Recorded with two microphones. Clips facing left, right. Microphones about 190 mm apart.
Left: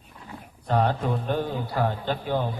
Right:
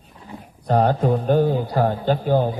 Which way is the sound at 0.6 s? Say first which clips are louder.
Right 6 dB; 40° right (ahead or behind).